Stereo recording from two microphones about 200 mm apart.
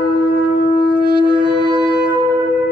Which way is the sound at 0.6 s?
55° left (ahead or behind).